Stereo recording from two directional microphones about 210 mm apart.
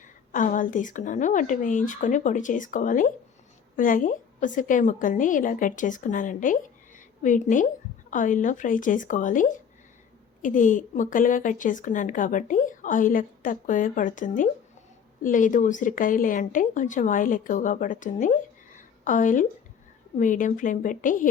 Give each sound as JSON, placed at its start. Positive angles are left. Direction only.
{"t": 0.0, "sound": "speech", "side_deg": 40}
{"t": 18.8, "sound": "a sound", "side_deg": 40}
{"t": 20.1, "sound": "speech", "side_deg": 40}